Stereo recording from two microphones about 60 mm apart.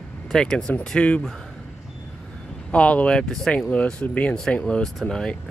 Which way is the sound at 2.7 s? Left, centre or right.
Left.